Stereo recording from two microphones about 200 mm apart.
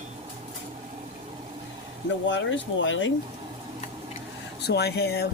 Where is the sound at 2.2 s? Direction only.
70° left (ahead or behind).